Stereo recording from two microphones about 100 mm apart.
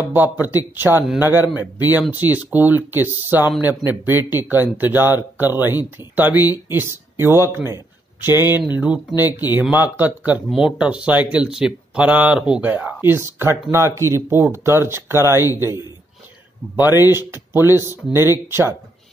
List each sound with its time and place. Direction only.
0.1 s a man's voice: 20° right (ahead or behind)